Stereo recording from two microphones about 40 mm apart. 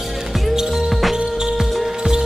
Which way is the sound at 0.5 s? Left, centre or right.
Centre.